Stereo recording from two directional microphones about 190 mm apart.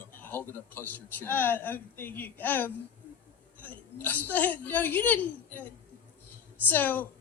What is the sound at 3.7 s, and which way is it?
A man's voice, 10° left (ahead or behind).